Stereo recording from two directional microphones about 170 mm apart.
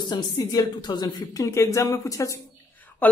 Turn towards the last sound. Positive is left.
turn(degrees=10)  # may be behind; listen again after turning